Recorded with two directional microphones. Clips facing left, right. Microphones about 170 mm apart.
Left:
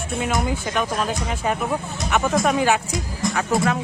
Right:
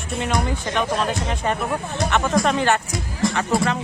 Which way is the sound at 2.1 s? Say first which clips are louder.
Left 1 dB; 5° left (ahead or behind).